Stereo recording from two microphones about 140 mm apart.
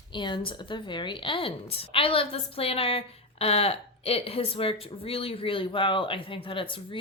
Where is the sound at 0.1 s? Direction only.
35° left (ahead or behind).